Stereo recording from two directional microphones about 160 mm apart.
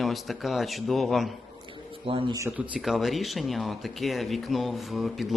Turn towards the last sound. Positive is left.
turn(degrees=0)  # may be behind; listen again after turning